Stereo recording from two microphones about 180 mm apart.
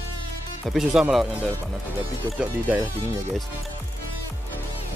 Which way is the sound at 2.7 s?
5° right (ahead or behind).